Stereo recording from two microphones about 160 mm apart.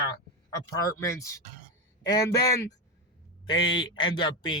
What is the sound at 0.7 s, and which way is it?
Speech, 20° left (ahead or behind).